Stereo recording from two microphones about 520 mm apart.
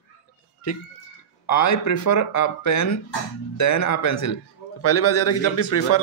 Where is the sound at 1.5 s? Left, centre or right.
Left.